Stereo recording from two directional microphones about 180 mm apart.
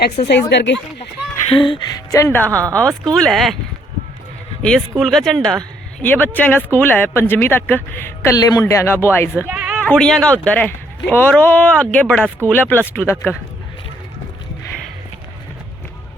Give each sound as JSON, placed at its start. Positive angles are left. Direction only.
{"t": 0.2, "sound": "speech", "side_deg": 35}
{"t": 0.5, "sound": "speech", "side_deg": 75}
{"t": 1.5, "sound": "speech", "side_deg": 30}
{"t": 2.5, "sound": "speech", "side_deg": -20}
{"t": 3.1, "sound": "speech", "side_deg": 0}
{"t": 4.6, "sound": "speech", "side_deg": 5}
{"t": 9.5, "sound": "a sound", "side_deg": -10}
{"t": 9.8, "sound": "speech", "side_deg": 5}